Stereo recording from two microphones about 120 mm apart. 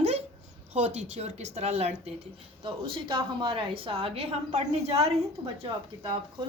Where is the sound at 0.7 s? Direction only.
70° right (ahead or behind).